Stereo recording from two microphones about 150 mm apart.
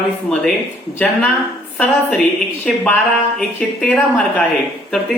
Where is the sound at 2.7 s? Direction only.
5° left (ahead or behind).